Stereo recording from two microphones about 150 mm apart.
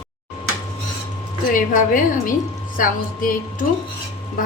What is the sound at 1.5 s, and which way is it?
A woman's voice, 65° left (ahead or behind).